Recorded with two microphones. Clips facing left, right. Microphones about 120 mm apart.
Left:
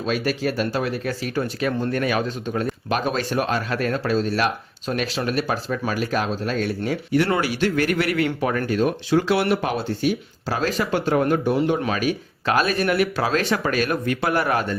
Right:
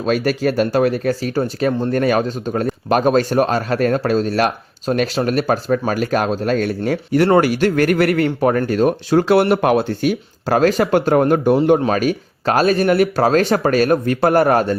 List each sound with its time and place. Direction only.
0.0 s speech: 50° right (ahead or behind)
8.2 s speech: 40° right (ahead or behind)
9.5 s speech: 60° right (ahead or behind)
11.9 s speech: 45° right (ahead or behind)
12.9 s speech: 40° right (ahead or behind)